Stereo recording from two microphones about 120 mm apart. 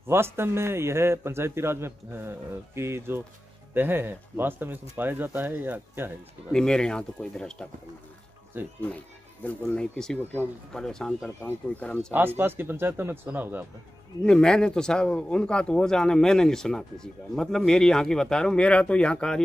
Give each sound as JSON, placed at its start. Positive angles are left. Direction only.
{"t": 0.1, "sound": "a man's voice", "side_deg": -20}
{"t": 6.5, "sound": "speech", "side_deg": 5}
{"t": 9.4, "sound": "speech", "side_deg": 10}
{"t": 12.1, "sound": "speech", "side_deg": -20}
{"t": 14.2, "sound": "speech", "side_deg": 5}